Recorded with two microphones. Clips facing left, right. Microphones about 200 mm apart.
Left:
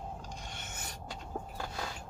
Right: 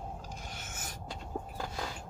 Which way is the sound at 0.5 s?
Centre (ahead or behind).